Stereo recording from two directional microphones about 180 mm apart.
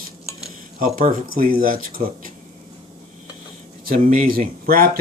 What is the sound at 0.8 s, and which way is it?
Speech, 50° right (ahead or behind).